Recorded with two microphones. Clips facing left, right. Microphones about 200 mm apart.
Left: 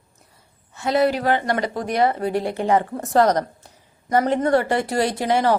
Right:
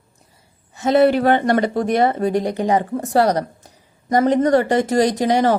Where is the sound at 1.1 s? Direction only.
55° right (ahead or behind).